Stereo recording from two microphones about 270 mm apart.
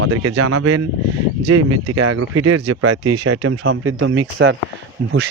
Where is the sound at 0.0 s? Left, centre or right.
Right.